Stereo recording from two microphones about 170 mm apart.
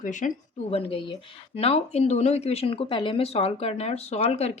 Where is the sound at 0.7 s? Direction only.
35° left (ahead or behind).